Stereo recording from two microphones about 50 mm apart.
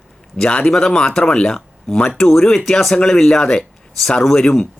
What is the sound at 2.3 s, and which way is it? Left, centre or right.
Speech, centre.